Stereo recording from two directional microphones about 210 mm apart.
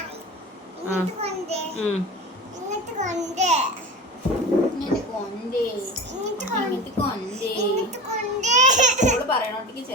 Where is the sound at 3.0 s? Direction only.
35° right (ahead or behind).